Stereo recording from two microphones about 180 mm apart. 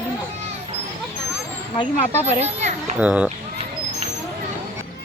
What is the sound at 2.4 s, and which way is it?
Speech, 40° right (ahead or behind).